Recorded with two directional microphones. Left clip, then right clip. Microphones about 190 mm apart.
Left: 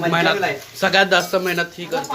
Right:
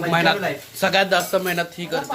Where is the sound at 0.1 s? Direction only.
10° right (ahead or behind).